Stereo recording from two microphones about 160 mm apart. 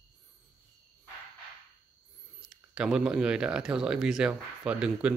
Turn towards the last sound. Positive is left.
turn(degrees=-5)  # may be behind; listen again after turning